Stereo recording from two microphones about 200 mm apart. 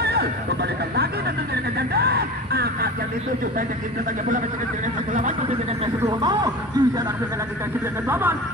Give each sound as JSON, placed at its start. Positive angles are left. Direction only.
{"t": 0.0, "sound": "a sound", "side_deg": -55}
{"t": 6.0, "sound": "speech", "side_deg": -20}
{"t": 8.1, "sound": "speech", "side_deg": -10}